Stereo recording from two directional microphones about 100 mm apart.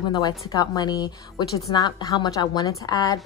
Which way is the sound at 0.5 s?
40° left (ahead or behind).